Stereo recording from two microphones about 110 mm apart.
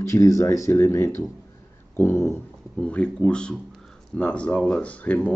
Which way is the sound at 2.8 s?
10° left (ahead or behind).